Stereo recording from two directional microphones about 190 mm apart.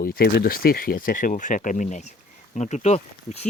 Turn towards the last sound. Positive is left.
turn(degrees=35)  # may be behind; listen again after turning